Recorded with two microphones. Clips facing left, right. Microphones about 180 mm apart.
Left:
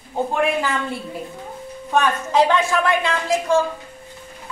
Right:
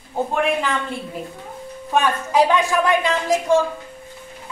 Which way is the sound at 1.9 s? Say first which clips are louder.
Even; 10° right (ahead or behind).